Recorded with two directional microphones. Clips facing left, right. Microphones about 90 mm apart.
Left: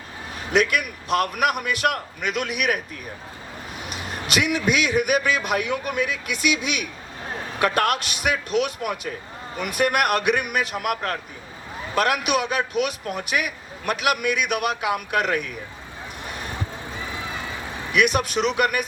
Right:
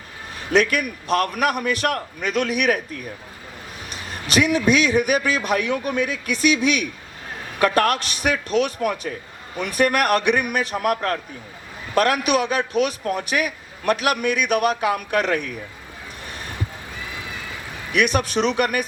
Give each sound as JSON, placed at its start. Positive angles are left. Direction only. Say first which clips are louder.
{"t": 0.5, "sound": "a man's voice", "louder": "right 2 dB", "side_deg": -40}
{"t": 3.9, "sound": "a man's voice", "louder": "right 4 dB", "side_deg": -35}
{"t": 17.9, "sound": "a man's voice", "louder": "right 1 dB", "side_deg": -35}